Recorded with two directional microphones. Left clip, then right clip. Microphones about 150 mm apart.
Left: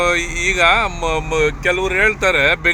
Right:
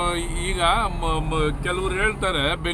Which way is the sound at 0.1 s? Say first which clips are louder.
Left 10 dB; 15° left (ahead or behind).